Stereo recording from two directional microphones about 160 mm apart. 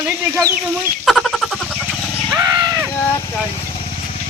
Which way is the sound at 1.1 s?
Centre (ahead or behind).